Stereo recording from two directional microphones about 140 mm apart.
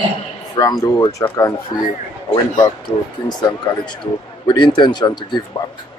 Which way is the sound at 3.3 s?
30° left (ahead or behind).